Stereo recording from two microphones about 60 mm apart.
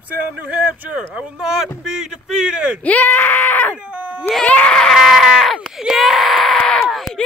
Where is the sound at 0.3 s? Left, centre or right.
Right.